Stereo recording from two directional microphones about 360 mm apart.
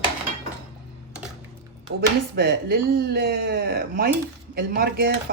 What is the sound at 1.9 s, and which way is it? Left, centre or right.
Speech, right.